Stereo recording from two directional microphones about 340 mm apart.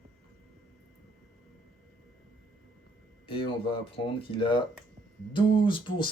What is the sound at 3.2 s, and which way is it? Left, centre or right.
Speech, centre.